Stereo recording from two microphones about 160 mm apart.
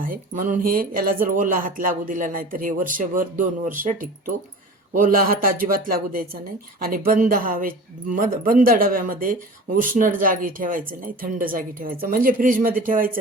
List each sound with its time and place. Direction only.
0.0 s speech: 60° right (ahead or behind)
4.9 s speech: 60° right (ahead or behind)